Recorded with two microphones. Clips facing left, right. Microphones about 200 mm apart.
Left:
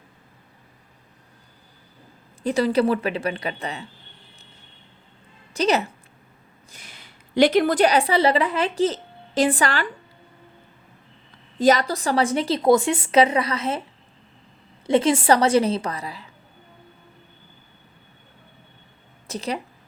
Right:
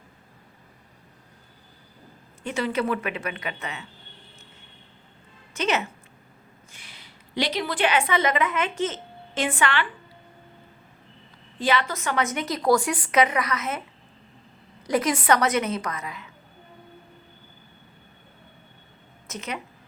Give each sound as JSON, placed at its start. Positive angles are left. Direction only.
{"t": 2.4, "sound": "a woman's voice", "side_deg": 35}
{"t": 5.5, "sound": "a woman's voice", "side_deg": 35}
{"t": 11.6, "sound": "a woman's voice", "side_deg": 40}
{"t": 14.8, "sound": "a woman's voice", "side_deg": 25}
{"t": 19.3, "sound": "a woman's voice", "side_deg": 35}